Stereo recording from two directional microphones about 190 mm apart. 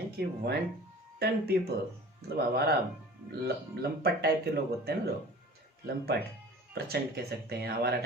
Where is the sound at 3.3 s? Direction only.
60° right (ahead or behind).